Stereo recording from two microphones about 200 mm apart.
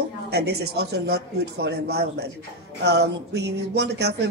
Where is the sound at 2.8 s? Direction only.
55° right (ahead or behind).